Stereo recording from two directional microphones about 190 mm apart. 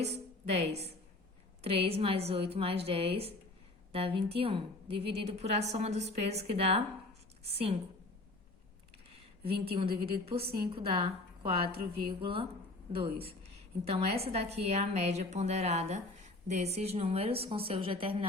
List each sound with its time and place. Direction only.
0.0 s a woman's voice: 35° right (ahead or behind)
9.4 s a woman's voice: 30° right (ahead or behind)
13.8 s a woman's voice: 30° right (ahead or behind)